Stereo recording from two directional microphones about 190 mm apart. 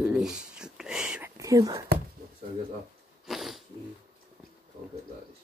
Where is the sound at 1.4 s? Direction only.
20° right (ahead or behind).